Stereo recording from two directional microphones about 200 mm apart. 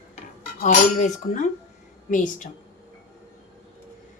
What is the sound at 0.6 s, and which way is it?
Speech, 35° left (ahead or behind).